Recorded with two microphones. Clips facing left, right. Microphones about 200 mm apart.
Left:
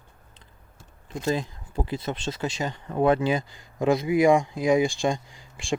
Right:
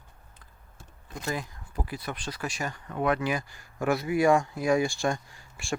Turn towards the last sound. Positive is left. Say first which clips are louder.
# left 4 dB
turn(degrees=15)  # may be behind; listen again after turning